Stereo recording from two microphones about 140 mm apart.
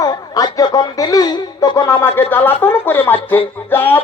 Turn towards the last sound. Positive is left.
turn(degrees=15)  # may be behind; listen again after turning